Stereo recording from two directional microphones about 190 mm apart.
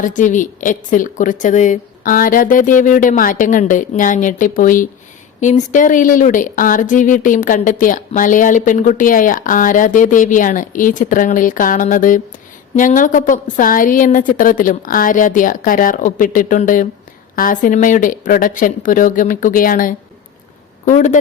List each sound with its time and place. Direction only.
0.0 s speech: 40° left (ahead or behind)